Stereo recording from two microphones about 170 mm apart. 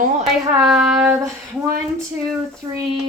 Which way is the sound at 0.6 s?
Centre (ahead or behind).